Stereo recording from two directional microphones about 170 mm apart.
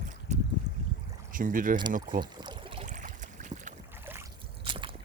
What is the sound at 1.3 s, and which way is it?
Speech, 55° right (ahead or behind).